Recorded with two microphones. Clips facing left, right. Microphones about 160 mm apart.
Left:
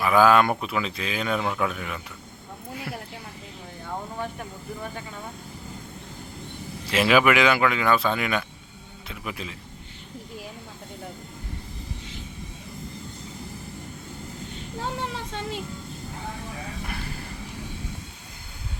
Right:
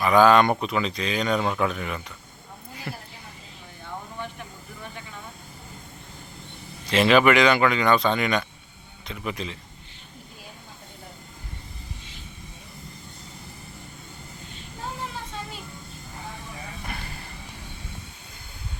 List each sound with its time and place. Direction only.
0.0 s speech: 5° left (ahead or behind)
2.9 s a sound: centre (ahead or behind)
6.9 s speech: 5° left (ahead or behind)
14.8 s music: 80° left